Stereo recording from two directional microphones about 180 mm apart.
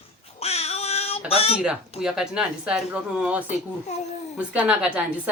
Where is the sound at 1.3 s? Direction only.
35° left (ahead or behind).